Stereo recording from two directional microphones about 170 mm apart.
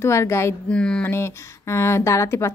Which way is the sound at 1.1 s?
15° left (ahead or behind).